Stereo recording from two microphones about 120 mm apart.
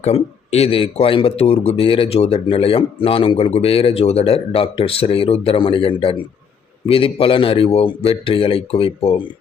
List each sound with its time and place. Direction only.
0.0 s a man's voice: 60° left (ahead or behind)